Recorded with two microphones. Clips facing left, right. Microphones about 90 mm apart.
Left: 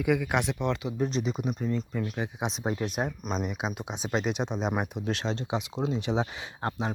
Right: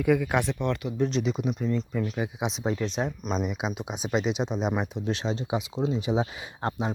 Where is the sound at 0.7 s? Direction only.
20° left (ahead or behind).